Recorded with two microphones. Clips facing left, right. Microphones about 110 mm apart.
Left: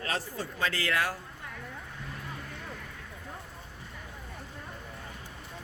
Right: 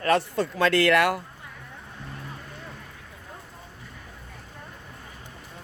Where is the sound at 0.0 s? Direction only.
65° right (ahead or behind).